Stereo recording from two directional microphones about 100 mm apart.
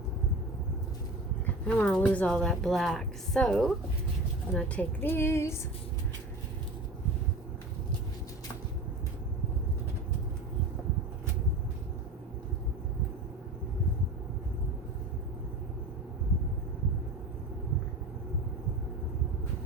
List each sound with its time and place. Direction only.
1.6 s a woman's voice: 15° left (ahead or behind)